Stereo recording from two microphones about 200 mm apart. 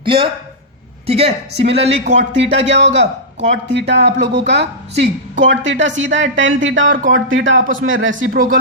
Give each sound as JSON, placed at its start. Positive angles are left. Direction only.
{"t": 0.0, "sound": "a man's voice", "side_deg": -25}
{"t": 2.3, "sound": "speech", "side_deg": -60}
{"t": 6.8, "sound": "speech", "side_deg": -40}
{"t": 7.1, "sound": "speech", "side_deg": -75}
{"t": 8.3, "sound": "speech", "side_deg": -45}